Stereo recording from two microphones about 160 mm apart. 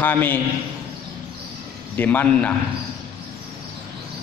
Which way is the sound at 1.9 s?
10° left (ahead or behind).